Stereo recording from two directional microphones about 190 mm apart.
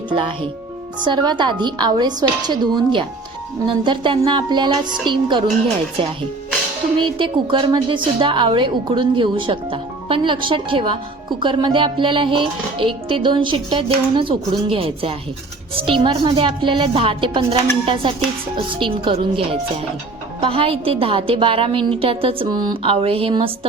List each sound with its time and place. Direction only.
0.1 s a woman's voice: 25° right (ahead or behind)
7.0 s a woman's voice: 25° right (ahead or behind)